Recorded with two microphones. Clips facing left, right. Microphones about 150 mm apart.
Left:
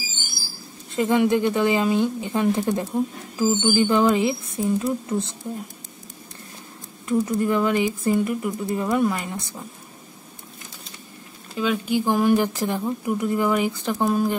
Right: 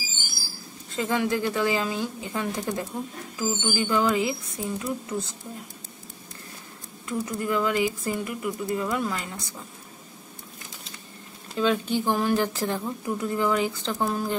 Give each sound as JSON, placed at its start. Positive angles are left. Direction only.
{"t": 0.9, "sound": "speech", "side_deg": 20}
{"t": 7.1, "sound": "speech", "side_deg": 25}
{"t": 11.5, "sound": "speech", "side_deg": 10}